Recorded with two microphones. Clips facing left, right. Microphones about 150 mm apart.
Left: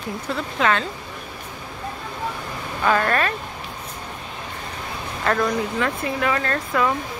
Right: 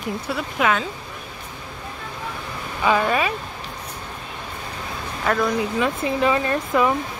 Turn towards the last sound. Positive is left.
turn(degrees=-15)  # may be behind; listen again after turning